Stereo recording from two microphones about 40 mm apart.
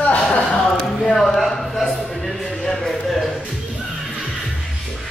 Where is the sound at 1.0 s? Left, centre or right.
Centre.